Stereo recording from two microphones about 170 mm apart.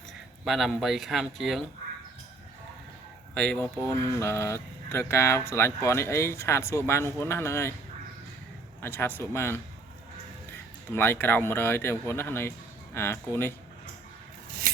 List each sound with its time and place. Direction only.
0.4 s speech: centre (ahead or behind)
3.3 s speech: 5° left (ahead or behind)
8.8 s speech: 10° left (ahead or behind)
10.9 s speech: 10° left (ahead or behind)